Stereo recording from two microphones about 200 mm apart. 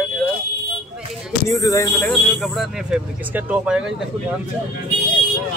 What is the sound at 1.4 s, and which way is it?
Speech, 15° left (ahead or behind).